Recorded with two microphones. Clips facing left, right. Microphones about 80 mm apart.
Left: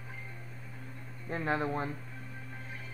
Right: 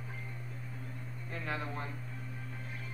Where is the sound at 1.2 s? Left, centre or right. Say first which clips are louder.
Left 8 dB; left.